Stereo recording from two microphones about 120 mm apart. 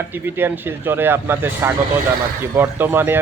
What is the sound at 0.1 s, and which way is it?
A man's voice, 20° right (ahead or behind).